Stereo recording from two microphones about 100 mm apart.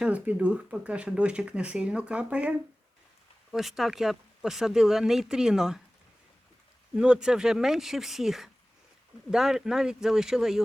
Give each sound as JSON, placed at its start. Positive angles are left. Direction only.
{"t": 0.0, "sound": "speech", "side_deg": -10}
{"t": 3.5, "sound": "speech", "side_deg": 0}
{"t": 6.9, "sound": "speech", "side_deg": -10}